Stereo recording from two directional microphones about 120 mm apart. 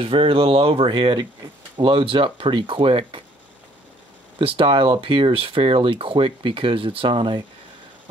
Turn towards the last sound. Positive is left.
turn(degrees=-45)  # may be behind; listen again after turning